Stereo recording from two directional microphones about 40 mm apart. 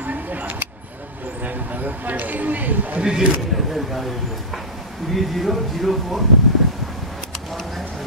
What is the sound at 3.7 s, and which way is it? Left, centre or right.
Speech, centre.